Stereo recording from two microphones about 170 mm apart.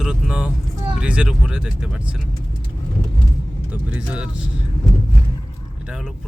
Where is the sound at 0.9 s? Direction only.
5° right (ahead or behind).